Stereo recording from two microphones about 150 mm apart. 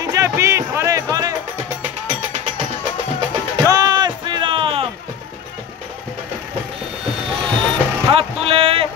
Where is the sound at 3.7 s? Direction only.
25° right (ahead or behind).